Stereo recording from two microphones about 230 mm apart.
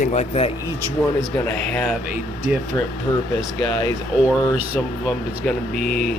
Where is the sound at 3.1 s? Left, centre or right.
Left.